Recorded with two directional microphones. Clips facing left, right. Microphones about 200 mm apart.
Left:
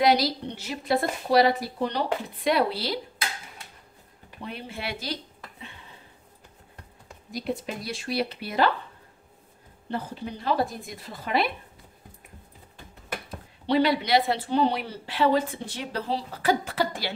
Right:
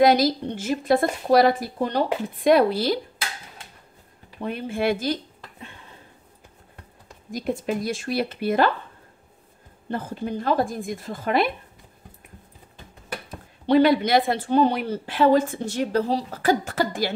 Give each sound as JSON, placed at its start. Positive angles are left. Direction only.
{"t": 0.0, "sound": "a woman's voice", "side_deg": -50}
{"t": 4.4, "sound": "speech", "side_deg": -50}
{"t": 7.2, "sound": "a woman's voice", "side_deg": -50}
{"t": 9.8, "sound": "a woman's voice", "side_deg": -50}
{"t": 13.7, "sound": "a woman's voice", "side_deg": -50}